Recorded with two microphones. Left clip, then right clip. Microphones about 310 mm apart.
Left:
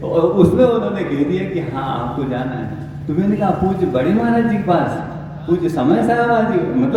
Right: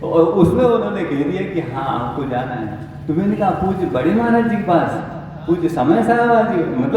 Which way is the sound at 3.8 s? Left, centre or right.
Centre.